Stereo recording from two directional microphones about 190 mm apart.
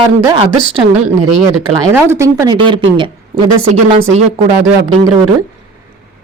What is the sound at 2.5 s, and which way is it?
Speech, 25° right (ahead or behind).